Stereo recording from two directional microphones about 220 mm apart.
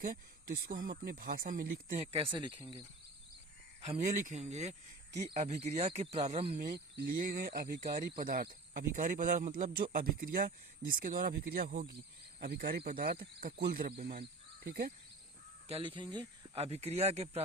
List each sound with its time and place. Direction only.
0.0 s speech: 40° right (ahead or behind); by 2.8 s 25° right (ahead or behind)
3.8 s speech: 35° right (ahead or behind)
15.6 s speech: 25° right (ahead or behind)